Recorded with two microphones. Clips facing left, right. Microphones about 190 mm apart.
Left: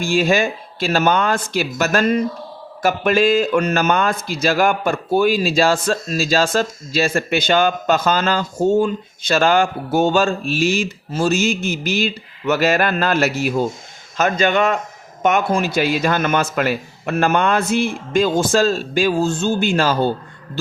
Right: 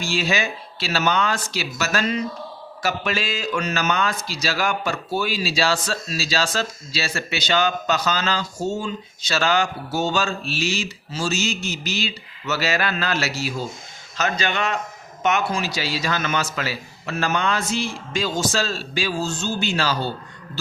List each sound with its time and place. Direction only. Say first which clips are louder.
0.0 s speech: left 7 dB; 50° left (ahead or behind)